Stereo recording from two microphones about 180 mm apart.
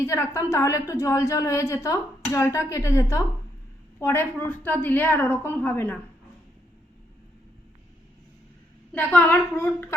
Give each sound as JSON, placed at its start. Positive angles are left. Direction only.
{"t": 0.0, "sound": "a woman's voice", "side_deg": 15}
{"t": 8.9, "sound": "a woman's voice", "side_deg": 10}